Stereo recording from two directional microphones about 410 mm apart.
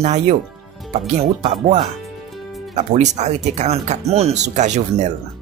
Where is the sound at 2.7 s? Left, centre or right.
Centre.